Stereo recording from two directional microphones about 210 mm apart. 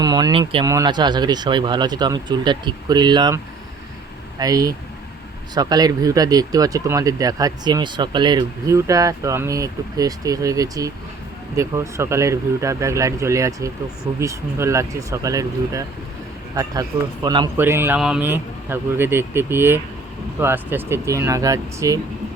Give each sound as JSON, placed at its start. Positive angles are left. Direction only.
{"t": 0.0, "sound": "speech", "side_deg": -20}